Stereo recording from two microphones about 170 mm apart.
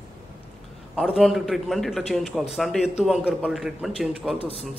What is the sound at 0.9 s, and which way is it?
A man's voice, 5° left (ahead or behind).